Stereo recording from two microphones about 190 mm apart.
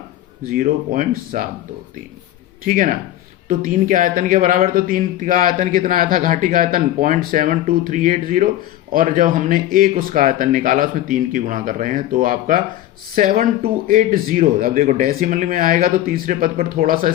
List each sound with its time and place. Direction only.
0.4 s speech: 45° right (ahead or behind)
2.6 s speech: 45° right (ahead or behind)